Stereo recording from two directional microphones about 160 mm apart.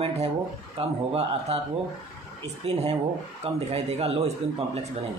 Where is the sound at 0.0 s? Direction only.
40° right (ahead or behind).